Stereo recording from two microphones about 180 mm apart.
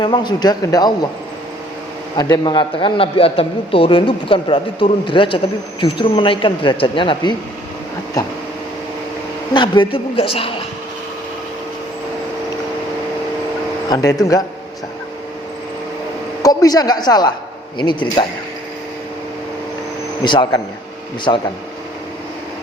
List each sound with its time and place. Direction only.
0.0 s a man's voice: 25° left (ahead or behind)
2.1 s a man's voice: 25° left (ahead or behind)
9.5 s a man's voice: 25° left (ahead or behind)
13.9 s a man's voice: 20° left (ahead or behind)
16.4 s a man's voice: 20° left (ahead or behind)
20.2 s a man's voice: 25° left (ahead or behind)